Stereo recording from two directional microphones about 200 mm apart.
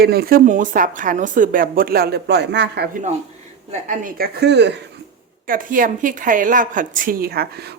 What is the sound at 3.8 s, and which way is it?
Speech, 40° right (ahead or behind).